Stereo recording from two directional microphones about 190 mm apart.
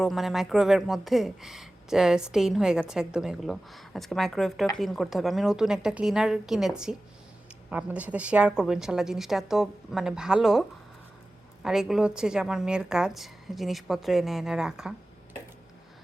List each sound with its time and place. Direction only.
0.0 s speech: centre (ahead or behind)